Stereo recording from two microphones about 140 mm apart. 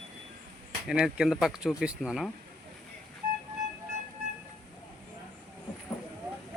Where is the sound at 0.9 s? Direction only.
5° right (ahead or behind).